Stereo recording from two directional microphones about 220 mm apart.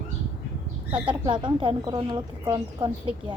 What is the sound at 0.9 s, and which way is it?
Speech, 25° right (ahead or behind).